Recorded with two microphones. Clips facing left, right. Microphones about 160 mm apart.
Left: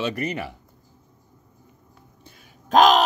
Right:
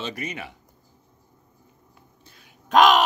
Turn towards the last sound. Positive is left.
turn(degrees=40)  # may be behind; listen again after turning